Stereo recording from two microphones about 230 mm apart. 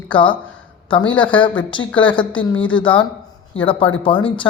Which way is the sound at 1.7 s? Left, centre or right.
Left.